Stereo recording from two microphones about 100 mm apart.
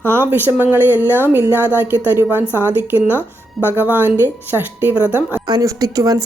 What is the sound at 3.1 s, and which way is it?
Speech, 20° left (ahead or behind).